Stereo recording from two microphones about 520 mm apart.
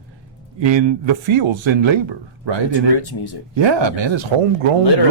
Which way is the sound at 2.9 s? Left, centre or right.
Left.